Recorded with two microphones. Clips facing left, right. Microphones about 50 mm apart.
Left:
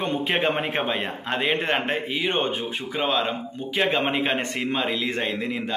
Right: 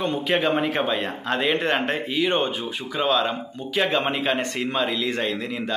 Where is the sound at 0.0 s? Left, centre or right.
Left.